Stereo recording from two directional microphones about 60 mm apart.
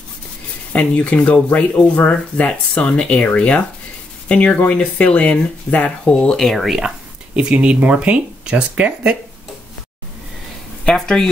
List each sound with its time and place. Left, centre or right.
0.7 s speech: left; by 6.8 s centre
7.3 s speech: right